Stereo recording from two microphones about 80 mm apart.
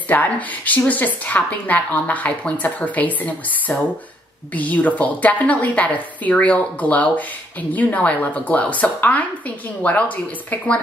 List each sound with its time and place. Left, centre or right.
0.1 s a woman's voice: left